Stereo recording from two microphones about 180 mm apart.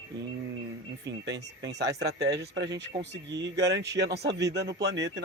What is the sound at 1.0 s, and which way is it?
Speech, 75° right (ahead or behind).